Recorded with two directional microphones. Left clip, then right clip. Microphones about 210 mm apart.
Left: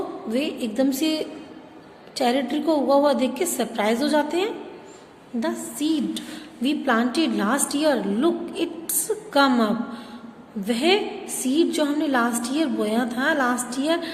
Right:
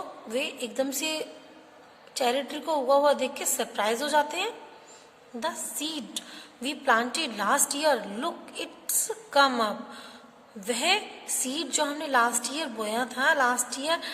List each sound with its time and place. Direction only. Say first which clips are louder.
0.3 s a woman's voice: left 4 dB; 25° right (ahead or behind)